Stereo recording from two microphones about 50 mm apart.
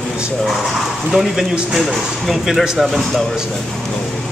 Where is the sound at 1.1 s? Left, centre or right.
Centre.